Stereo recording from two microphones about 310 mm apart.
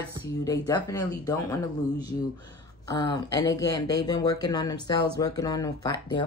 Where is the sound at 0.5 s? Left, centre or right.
Centre.